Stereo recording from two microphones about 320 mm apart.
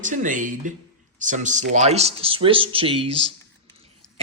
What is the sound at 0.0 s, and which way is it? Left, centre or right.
Speech, right.